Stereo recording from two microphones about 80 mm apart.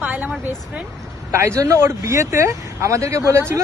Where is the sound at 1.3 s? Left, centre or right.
Right.